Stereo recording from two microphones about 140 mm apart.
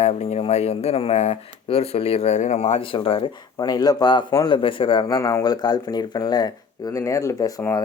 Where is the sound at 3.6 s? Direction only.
30° left (ahead or behind).